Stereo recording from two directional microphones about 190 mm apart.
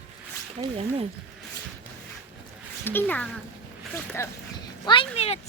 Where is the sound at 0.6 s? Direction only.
30° right (ahead or behind).